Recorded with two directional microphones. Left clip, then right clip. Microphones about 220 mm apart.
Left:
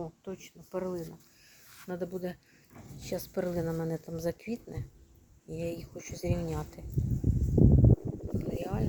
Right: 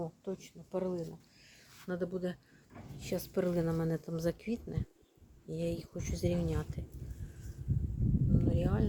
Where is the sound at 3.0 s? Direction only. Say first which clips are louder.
Even; 10° right (ahead or behind).